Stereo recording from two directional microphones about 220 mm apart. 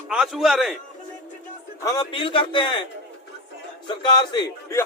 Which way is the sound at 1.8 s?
15° left (ahead or behind).